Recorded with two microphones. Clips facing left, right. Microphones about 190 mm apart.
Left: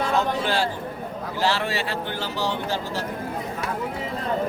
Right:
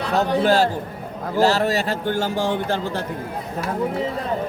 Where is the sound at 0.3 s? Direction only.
45° right (ahead or behind).